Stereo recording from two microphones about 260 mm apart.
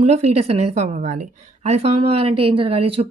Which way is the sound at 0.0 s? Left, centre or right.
Right.